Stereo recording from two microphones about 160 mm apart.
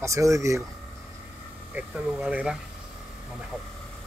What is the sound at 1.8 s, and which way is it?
Speech, 5° right (ahead or behind).